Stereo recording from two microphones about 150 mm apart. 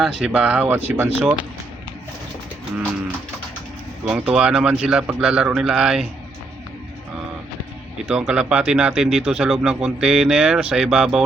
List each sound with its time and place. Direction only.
0.0 s speech: centre (ahead or behind)
4.0 s speech: 5° right (ahead or behind)
8.0 s speech: 5° right (ahead or behind)